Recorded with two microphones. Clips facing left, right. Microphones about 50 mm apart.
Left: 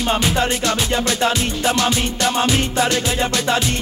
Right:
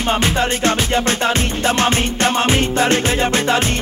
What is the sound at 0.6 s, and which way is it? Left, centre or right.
Music, right.